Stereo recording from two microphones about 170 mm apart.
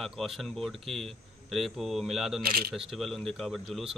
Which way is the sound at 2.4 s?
60° right (ahead or behind).